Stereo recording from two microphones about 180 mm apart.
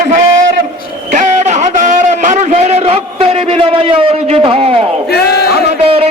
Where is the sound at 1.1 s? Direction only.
40° right (ahead or behind).